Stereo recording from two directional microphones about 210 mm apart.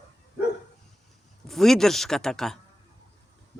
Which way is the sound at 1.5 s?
Centre (ahead or behind).